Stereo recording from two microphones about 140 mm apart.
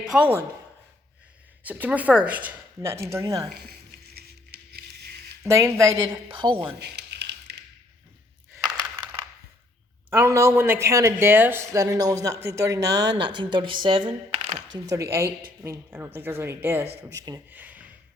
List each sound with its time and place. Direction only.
0.0 s speech: 10° right (ahead or behind)
1.6 s speech: 10° right (ahead or behind)
5.5 s speech: 20° right (ahead or behind)
6.3 s a woman's voice: 35° right (ahead or behind)
8.5 s a sound: 25° right (ahead or behind)
10.1 s speech: 20° right (ahead or behind)
13.3 s a woman's voice: 35° right (ahead or behind)
14.8 s speech: 20° right (ahead or behind)
17.5 s gasp: 10° right (ahead or behind)